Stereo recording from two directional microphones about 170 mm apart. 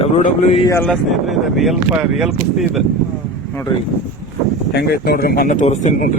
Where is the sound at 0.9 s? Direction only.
Centre (ahead or behind).